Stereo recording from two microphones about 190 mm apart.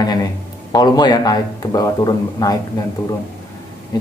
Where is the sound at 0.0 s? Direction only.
20° left (ahead or behind).